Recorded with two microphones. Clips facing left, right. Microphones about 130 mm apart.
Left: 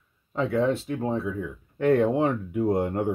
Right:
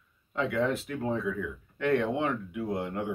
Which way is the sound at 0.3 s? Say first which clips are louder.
Left 4 dB; 35° left (ahead or behind).